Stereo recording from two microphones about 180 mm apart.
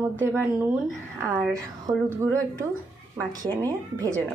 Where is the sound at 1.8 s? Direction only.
15° right (ahead or behind).